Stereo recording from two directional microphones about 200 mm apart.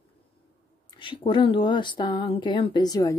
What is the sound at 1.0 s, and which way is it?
Speech, 25° left (ahead or behind).